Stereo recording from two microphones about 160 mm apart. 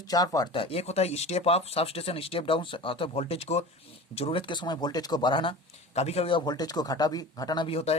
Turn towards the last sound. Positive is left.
turn(degrees=40)  # may be behind; listen again after turning